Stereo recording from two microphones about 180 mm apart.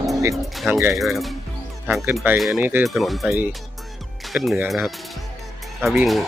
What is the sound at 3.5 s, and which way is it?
Music, centre (ahead or behind).